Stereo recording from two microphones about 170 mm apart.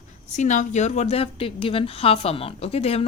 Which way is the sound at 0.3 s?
45° left (ahead or behind).